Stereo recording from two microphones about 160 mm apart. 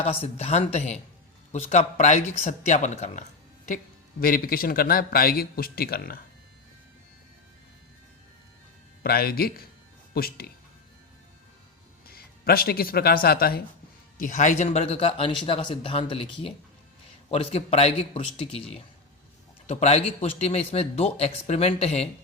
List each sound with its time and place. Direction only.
0.0 s speech: 35° left (ahead or behind)
4.2 s a man's voice: 65° left (ahead or behind)
9.0 s a man's voice: 75° left (ahead or behind)
12.0 s speech: 70° left (ahead or behind)
14.2 s speech: 55° left (ahead or behind); by 18.6 s 35° left (ahead or behind)
19.6 s speech: 40° left (ahead or behind)